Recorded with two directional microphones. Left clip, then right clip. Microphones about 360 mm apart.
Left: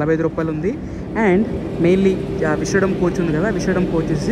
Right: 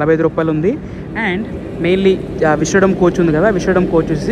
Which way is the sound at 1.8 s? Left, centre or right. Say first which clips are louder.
Right 3 dB; left.